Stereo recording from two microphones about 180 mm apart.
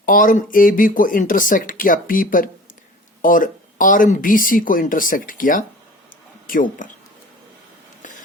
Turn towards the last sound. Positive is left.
turn(degrees=50)  # may be behind; listen again after turning